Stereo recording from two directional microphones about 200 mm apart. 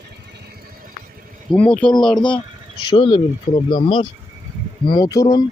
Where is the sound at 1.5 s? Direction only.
5° left (ahead or behind).